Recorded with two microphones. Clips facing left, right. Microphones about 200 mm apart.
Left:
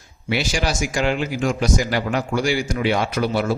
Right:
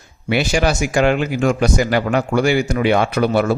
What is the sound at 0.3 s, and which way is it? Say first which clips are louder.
Speech: right 6 dB; 55° right (ahead or behind).